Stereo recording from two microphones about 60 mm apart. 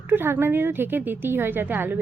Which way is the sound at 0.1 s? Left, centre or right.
Right.